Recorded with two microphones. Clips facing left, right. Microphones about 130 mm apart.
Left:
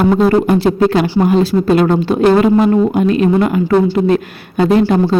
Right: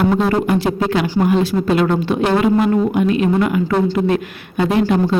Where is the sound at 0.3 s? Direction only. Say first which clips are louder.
Left 5 dB; 35° left (ahead or behind).